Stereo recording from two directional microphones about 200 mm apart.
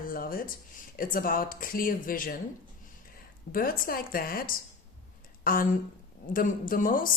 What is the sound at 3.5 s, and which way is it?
A woman's voice, 45° left (ahead or behind).